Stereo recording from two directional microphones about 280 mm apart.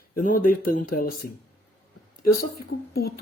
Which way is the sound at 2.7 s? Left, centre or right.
Left.